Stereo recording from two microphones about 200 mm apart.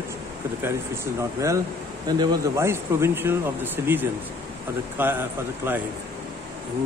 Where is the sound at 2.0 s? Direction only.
20° right (ahead or behind).